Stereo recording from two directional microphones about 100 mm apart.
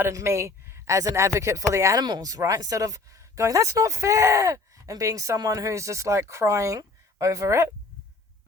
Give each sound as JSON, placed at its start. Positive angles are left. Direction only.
{"t": 0.0, "sound": "speech", "side_deg": -30}